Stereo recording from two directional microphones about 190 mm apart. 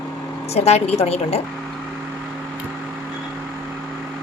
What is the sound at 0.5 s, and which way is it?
Speech, 35° left (ahead or behind).